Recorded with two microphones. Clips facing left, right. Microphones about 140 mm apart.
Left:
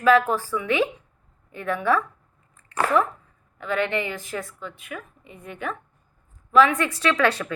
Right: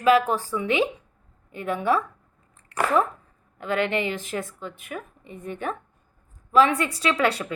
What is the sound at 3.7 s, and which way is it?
A woman's voice, 30° right (ahead or behind).